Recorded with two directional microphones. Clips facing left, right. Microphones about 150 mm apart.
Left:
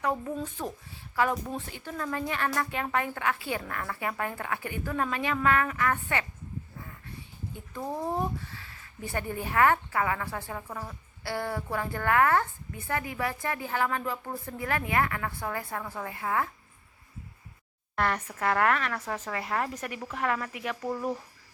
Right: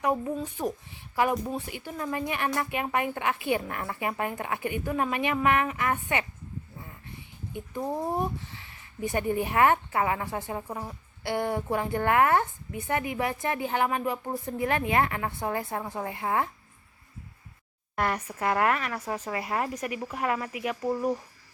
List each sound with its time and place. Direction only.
0.0 s speech: 15° right (ahead or behind)
7.7 s speech: 15° right (ahead or behind)
17.9 s speech: 10° right (ahead or behind)